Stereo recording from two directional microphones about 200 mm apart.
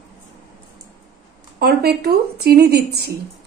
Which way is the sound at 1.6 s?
50° right (ahead or behind).